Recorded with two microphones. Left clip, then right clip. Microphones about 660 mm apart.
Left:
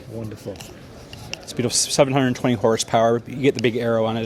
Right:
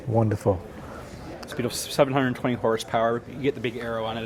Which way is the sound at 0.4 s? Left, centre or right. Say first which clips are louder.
Right 10 dB; right.